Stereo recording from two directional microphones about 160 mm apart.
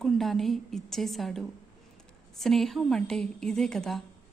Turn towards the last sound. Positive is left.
turn(degrees=5)  # may be behind; listen again after turning